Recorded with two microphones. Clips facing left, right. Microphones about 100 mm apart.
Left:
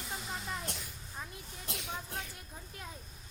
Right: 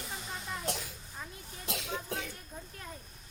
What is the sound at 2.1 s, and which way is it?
Speech, 90° right.